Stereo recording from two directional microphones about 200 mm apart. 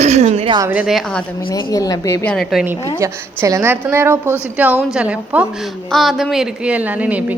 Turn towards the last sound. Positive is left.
turn(degrees=-5)  # may be behind; listen again after turning